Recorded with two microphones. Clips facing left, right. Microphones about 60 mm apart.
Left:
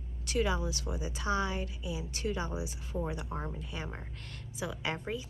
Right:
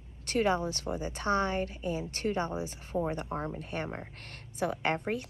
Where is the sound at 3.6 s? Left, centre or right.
Right.